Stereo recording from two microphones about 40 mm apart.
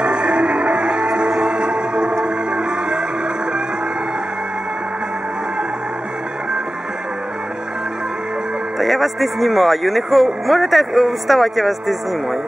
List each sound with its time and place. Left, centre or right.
0.0 s music: right
8.7 s a man's voice: centre